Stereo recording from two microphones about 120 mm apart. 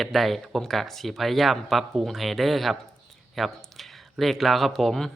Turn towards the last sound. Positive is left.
turn(degrees=0)  # may be behind; listen again after turning